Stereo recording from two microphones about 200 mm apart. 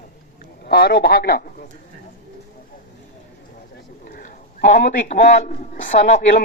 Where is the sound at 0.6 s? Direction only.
50° left (ahead or behind).